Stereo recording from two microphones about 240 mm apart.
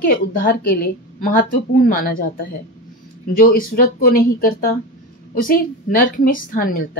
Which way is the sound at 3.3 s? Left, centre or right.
Left.